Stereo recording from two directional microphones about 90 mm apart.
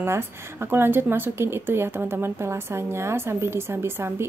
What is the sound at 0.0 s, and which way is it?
Speech, 25° right (ahead or behind).